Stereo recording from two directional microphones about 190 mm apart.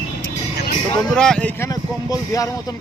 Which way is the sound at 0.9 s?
5° left (ahead or behind).